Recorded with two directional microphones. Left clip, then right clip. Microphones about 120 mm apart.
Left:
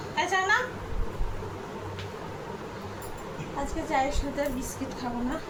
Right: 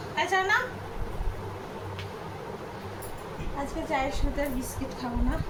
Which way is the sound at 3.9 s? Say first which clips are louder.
Left 3 dB; 20° left (ahead or behind).